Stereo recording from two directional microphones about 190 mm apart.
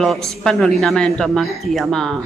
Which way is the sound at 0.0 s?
Centre (ahead or behind).